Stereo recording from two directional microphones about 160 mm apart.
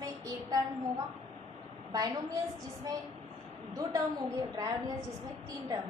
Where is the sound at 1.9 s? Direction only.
20° right (ahead or behind).